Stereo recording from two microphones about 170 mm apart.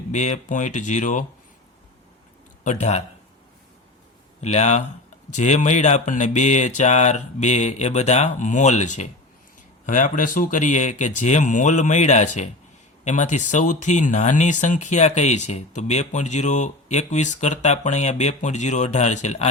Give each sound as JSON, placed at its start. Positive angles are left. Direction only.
{"t": 0.1, "sound": "speech", "side_deg": 45}
{"t": 2.6, "sound": "speech", "side_deg": 40}
{"t": 4.4, "sound": "speech", "side_deg": 40}